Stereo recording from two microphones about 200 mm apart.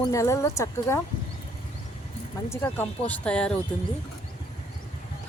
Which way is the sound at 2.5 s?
10° left (ahead or behind).